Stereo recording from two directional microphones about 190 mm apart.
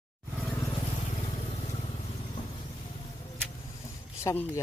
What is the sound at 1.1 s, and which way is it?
Vehicle, 35° left (ahead or behind).